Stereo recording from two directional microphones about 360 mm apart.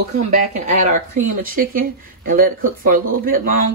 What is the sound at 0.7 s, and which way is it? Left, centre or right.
Speech, right.